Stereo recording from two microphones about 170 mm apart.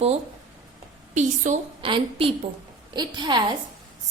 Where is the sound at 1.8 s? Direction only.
30° right (ahead or behind).